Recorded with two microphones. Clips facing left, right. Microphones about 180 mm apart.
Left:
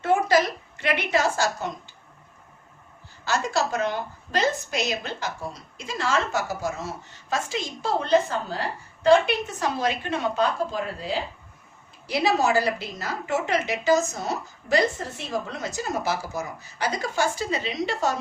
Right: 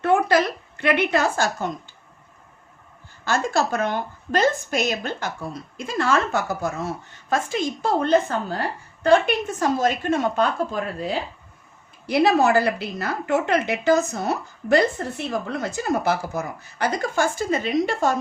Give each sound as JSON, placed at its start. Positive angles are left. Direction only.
{"t": 0.0, "sound": "a sound", "side_deg": -60}
{"t": 3.2, "sound": "a woman's voice", "side_deg": -55}
{"t": 12.0, "sound": "a woman's voice", "side_deg": -55}